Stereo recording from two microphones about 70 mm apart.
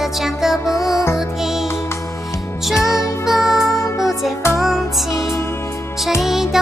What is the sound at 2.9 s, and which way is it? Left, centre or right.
Music, left.